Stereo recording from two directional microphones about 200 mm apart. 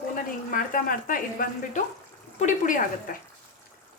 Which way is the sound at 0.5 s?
45° left (ahead or behind).